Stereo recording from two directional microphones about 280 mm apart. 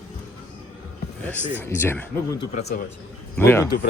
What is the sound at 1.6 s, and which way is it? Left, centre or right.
Speech, centre.